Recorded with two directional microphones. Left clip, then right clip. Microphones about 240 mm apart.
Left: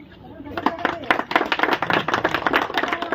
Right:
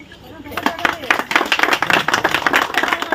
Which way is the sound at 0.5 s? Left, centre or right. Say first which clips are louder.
Right 4 dB; right.